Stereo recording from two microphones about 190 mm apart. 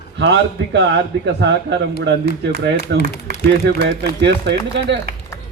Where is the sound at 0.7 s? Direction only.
70° right (ahead or behind).